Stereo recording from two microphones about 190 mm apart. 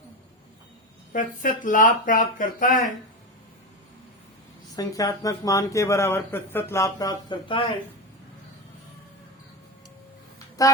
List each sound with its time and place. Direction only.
1.1 s speech: 45° left (ahead or behind)
4.7 s speech: 20° left (ahead or behind)
10.6 s speech: 20° left (ahead or behind)